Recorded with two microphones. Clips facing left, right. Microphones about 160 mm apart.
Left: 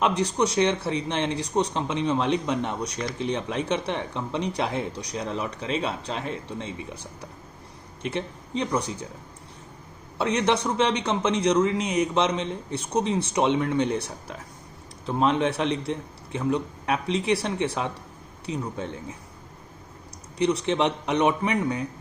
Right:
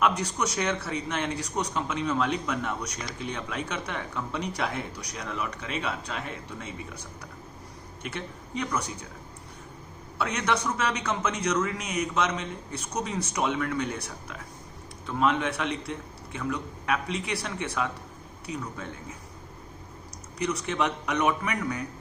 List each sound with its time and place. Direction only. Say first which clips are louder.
0.0 s speech: left 3 dB; 30° left (ahead or behind)
10.2 s a man's voice: left 5 dB; 30° left (ahead or behind)
20.4 s speech: left 5 dB; 30° left (ahead or behind)